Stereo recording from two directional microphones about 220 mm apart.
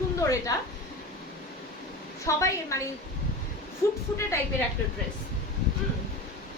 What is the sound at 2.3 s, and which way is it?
Speech, 15° left (ahead or behind).